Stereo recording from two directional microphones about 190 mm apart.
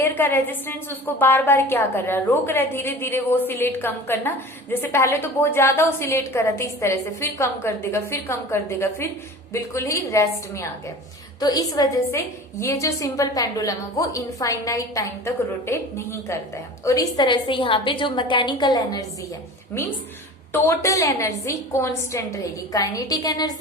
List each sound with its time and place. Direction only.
0.0 s a woman's voice: 10° left (ahead or behind)
20.5 s a woman's voice: 15° left (ahead or behind)